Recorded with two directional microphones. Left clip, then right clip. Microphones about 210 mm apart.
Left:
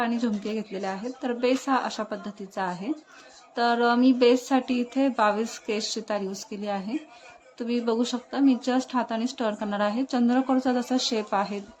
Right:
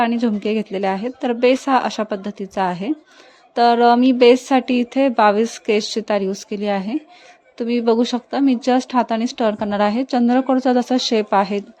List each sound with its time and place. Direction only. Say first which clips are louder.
0.0 s speech: right 9 dB; 35° right (ahead or behind)